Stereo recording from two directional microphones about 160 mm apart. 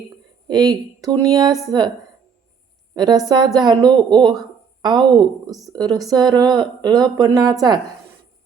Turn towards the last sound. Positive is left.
turn(degrees=-25)  # may be behind; listen again after turning